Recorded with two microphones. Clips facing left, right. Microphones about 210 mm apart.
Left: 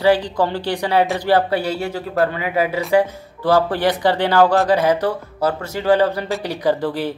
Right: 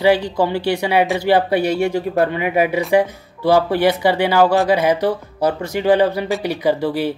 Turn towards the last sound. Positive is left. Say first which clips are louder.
# right 1 dB
turn(degrees=-10)  # may be behind; listen again after turning